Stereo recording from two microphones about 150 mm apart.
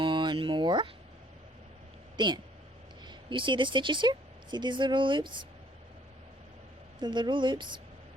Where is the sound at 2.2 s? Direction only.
30° right (ahead or behind).